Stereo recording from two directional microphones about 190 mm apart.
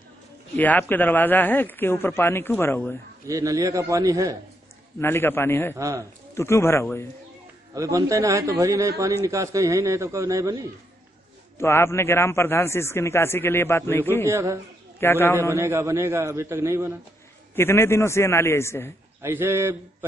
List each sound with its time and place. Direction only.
0.6 s a man's voice: 10° left (ahead or behind)
3.3 s a man's voice: 15° right (ahead or behind)
5.0 s a man's voice: 10° left (ahead or behind)
5.8 s a man's voice: 15° right (ahead or behind)
6.3 s a man's voice: 15° left (ahead or behind)
7.7 s a man's voice: 15° right (ahead or behind)
11.5 s a man's voice: 15° left (ahead or behind)
14.2 s a man's voice: 15° right (ahead or behind)
15.0 s a man's voice: 10° left (ahead or behind)
15.5 s a man's voice: 15° right (ahead or behind)
17.6 s a man's voice: 10° left (ahead or behind)
19.2 s a man's voice: 10° right (ahead or behind)